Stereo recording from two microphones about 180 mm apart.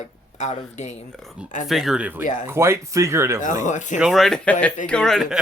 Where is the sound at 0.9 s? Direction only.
Centre (ahead or behind).